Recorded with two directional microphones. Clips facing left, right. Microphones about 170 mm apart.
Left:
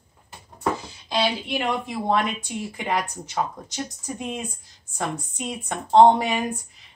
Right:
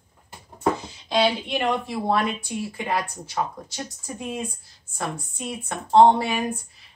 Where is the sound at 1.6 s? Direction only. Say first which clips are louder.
Right 3 dB; 20° left (ahead or behind).